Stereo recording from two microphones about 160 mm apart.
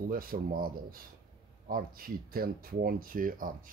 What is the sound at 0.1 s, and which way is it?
Speech, 65° right (ahead or behind).